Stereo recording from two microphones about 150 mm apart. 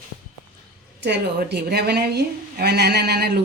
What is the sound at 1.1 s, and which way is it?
A woman's voice, 90° right.